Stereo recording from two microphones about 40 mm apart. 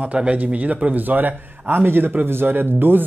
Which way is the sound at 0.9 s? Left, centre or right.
Right.